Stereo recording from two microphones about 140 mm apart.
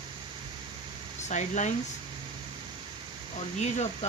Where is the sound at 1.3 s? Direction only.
60° left (ahead or behind).